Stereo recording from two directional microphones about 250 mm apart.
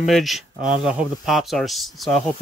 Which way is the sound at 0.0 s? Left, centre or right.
Centre.